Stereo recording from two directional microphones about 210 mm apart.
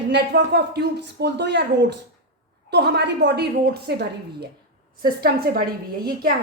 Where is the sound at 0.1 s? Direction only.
50° right (ahead or behind).